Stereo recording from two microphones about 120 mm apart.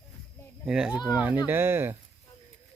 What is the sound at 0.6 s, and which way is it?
Speech, 5° right (ahead or behind).